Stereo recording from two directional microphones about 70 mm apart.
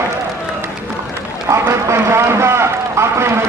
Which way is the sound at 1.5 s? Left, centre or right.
Right.